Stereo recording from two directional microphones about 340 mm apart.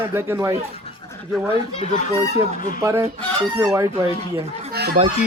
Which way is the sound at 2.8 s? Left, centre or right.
Centre.